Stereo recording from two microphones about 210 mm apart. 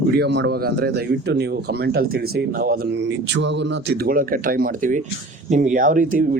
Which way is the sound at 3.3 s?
60° right (ahead or behind).